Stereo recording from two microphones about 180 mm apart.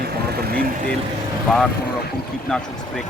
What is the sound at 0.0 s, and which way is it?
Vehicle, 55° right (ahead or behind).